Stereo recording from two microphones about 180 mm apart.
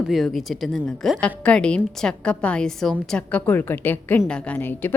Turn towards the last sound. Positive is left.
turn(degrees=10)  # may be behind; listen again after turning